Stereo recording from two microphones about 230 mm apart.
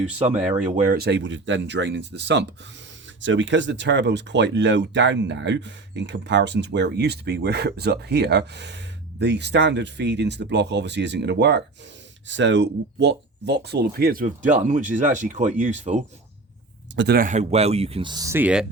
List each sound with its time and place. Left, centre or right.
0.3 s speech: centre
0.7 s speech: right
16.9 s speech: right; by 18.6 s centre